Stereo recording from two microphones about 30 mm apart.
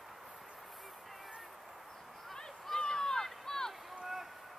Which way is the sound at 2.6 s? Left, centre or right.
Centre.